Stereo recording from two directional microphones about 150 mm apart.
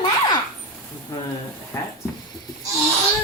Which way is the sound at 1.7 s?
15° left (ahead or behind).